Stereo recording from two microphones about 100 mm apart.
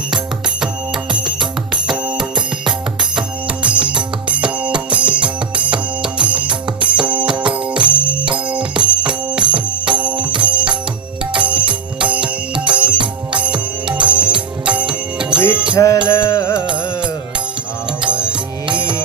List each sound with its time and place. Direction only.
1.1 s music: 5° right (ahead or behind)
15.3 s music: 50° right (ahead or behind)
15.8 s music: 35° left (ahead or behind)
18.1 s music: 10° right (ahead or behind)
18.7 s music: 50° right (ahead or behind)